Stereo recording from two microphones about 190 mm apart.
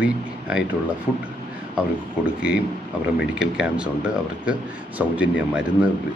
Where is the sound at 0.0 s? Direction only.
5° right (ahead or behind).